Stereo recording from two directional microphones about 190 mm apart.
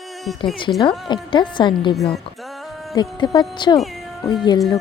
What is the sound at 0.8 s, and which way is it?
Speech, 25° left (ahead or behind).